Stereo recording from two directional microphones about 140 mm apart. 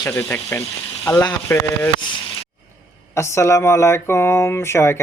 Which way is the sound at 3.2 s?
20° left (ahead or behind).